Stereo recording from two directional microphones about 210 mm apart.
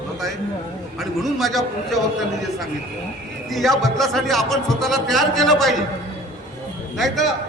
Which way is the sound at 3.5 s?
Centre (ahead or behind).